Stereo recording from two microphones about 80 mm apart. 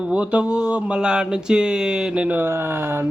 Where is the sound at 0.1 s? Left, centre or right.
Centre.